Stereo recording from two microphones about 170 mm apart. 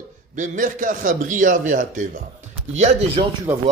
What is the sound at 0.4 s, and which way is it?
Speech, 50° right (ahead or behind).